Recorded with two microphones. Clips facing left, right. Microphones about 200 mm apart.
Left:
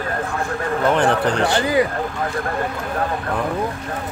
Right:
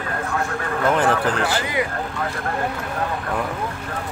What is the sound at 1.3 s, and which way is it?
Speech, 35° left (ahead or behind).